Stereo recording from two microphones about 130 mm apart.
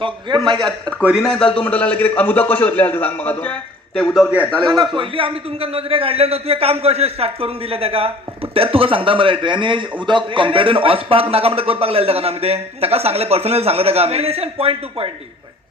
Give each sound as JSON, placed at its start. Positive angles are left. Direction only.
{"t": 0.0, "sound": "a man's voice", "side_deg": -35}
{"t": 0.6, "sound": "a man's voice", "side_deg": 5}
{"t": 4.9, "sound": "speech", "side_deg": -45}